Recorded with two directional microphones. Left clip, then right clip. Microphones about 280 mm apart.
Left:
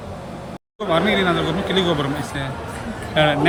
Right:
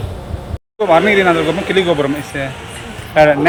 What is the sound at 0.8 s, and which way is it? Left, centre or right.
Speech, centre.